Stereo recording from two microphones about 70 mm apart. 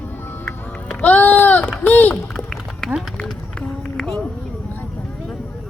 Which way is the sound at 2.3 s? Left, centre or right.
Centre.